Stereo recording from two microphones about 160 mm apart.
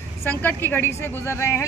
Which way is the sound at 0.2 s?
10° left (ahead or behind).